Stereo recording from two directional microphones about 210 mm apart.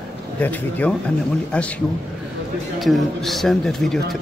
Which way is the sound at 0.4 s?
5° left (ahead or behind).